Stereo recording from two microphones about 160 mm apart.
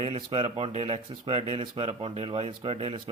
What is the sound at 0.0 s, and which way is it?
Speech, 35° right (ahead or behind).